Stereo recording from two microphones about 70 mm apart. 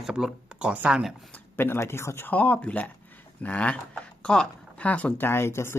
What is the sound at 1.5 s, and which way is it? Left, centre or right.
Speech, left.